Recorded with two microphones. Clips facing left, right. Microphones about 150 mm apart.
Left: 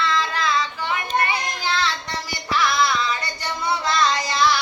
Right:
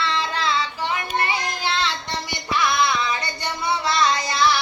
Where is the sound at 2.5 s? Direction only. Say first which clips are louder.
Even; 20° right (ahead or behind).